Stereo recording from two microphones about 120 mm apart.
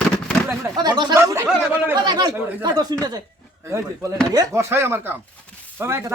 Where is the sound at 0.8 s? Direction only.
35° right (ahead or behind).